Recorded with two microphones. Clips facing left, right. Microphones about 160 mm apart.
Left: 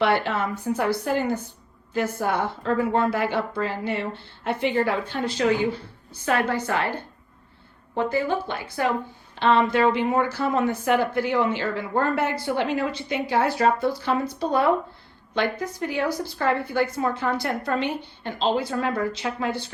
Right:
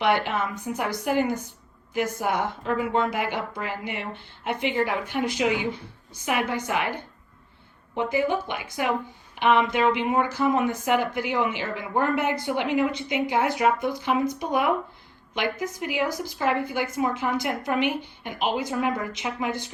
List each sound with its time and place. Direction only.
0.0 s a woman's voice: 15° right (ahead or behind)